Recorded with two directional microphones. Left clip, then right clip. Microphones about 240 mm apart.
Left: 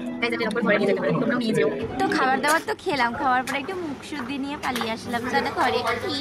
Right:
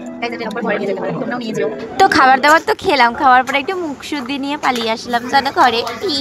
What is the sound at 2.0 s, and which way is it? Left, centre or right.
Speech, right.